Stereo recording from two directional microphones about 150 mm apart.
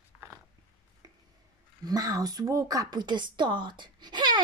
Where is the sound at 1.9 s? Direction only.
25° right (ahead or behind).